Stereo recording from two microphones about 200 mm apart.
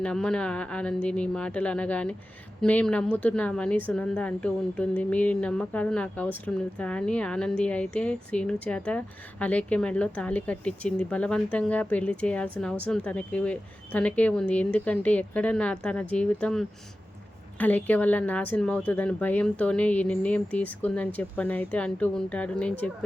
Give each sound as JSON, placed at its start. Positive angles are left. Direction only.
{"t": 0.0, "sound": "a woman's voice", "side_deg": 5}